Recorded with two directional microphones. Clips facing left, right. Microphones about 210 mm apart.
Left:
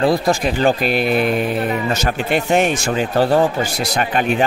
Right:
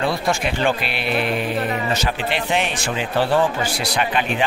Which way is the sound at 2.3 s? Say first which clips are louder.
Left 10 dB; 45° left (ahead or behind).